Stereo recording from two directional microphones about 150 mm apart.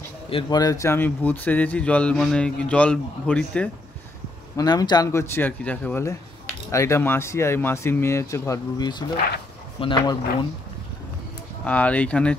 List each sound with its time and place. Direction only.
0.3 s speech: 30° left (ahead or behind); by 3.7 s 10° left (ahead or behind)
4.6 s speech: 25° left (ahead or behind)
11.6 s speech: 10° left (ahead or behind)